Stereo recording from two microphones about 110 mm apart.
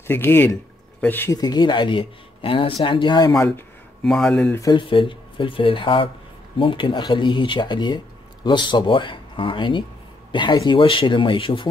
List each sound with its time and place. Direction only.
0.0 s speech: 20° left (ahead or behind)
1.3 s speech: 40° left (ahead or behind)
3.3 s speech: 20° left (ahead or behind)
4.0 s speech: 5° left (ahead or behind)
4.5 s speech: 30° left (ahead or behind)
4.7 s speech: 50° left (ahead or behind)
10.8 s speech: 50° left (ahead or behind)